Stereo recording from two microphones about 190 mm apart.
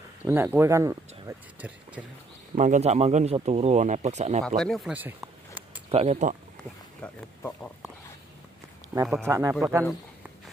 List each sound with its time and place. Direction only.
0.2 s speech: 10° right (ahead or behind)
2.5 s speech: 40° right (ahead or behind)
4.6 s speech: centre (ahead or behind)
5.9 s speech: 30° right (ahead or behind)
7.0 s speech: 5° left (ahead or behind)
9.0 s speech: 10° right (ahead or behind)